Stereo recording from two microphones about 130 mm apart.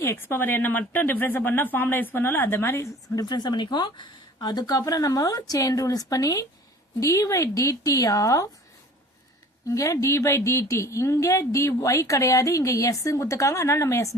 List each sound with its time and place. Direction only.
0.0 s speech: 20° left (ahead or behind)
9.6 s speech: 25° left (ahead or behind)